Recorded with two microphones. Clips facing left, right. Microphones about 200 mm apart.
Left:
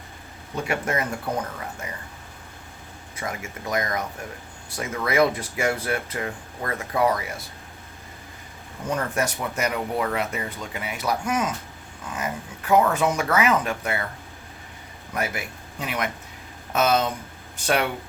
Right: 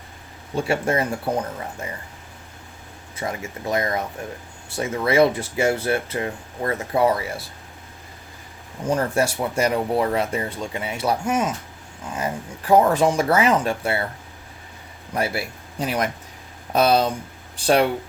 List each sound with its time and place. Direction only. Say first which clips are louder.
0.5 s speech: right 4 dB; 30° right (ahead or behind)
3.2 s speech: right 4 dB; 30° right (ahead or behind)
8.9 s speech: right 5 dB; 30° right (ahead or behind)
15.1 s speech: right 4 dB; 30° right (ahead or behind)